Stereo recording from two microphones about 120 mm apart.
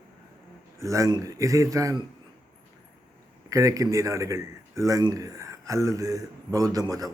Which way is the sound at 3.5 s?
25° right (ahead or behind).